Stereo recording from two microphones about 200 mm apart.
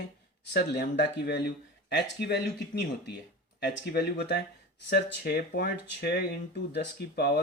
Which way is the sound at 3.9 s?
55° left (ahead or behind).